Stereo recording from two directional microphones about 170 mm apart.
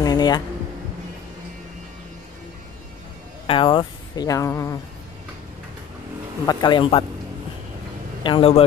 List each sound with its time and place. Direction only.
0.0 s a sound: 25° left (ahead or behind)
3.4 s speech: 30° left (ahead or behind)
6.4 s speech: 30° left (ahead or behind)
8.2 s a man's voice: 30° left (ahead or behind)